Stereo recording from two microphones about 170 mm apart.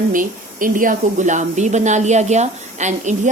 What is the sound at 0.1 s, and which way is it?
A woman's voice, 50° right (ahead or behind).